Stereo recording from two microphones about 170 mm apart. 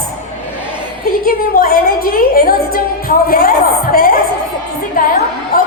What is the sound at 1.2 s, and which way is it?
A woman's voice, 60° left (ahead or behind).